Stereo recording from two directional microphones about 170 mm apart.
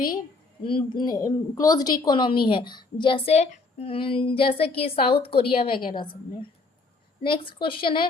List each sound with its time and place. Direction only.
0.6 s a woman's voice: 30° left (ahead or behind)
7.2 s a woman's voice: 30° left (ahead or behind)